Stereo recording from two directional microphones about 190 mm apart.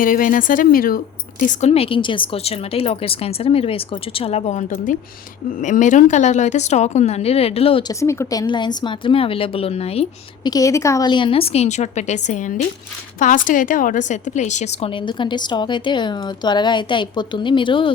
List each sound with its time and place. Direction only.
0.0 s a woman's voice: 45° left (ahead or behind)
10.5 s a woman's voice: 15° left (ahead or behind)